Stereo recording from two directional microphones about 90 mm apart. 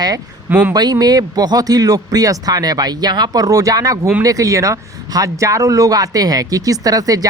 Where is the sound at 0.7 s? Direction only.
45° right (ahead or behind).